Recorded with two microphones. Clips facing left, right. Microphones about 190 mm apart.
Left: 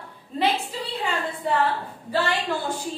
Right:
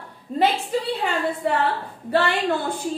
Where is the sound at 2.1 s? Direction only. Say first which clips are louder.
Right 4 dB; 60° right (ahead or behind).